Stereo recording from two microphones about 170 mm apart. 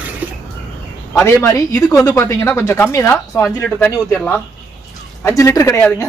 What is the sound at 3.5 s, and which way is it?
Speech, 5° left (ahead or behind).